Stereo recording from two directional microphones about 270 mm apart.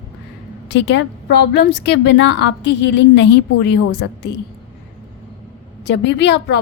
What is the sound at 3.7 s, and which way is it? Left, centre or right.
Speech, left.